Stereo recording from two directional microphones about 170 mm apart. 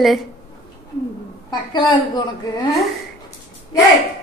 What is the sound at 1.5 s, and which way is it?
Speech, 25° left (ahead or behind).